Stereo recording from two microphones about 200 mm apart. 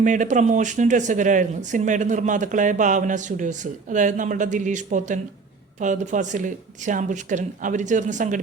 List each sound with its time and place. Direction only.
0.0 s speech: 40° right (ahead or behind)